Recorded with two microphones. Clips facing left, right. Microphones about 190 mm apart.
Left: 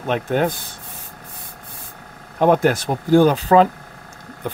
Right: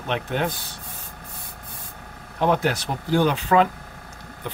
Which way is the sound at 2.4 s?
50° left (ahead or behind).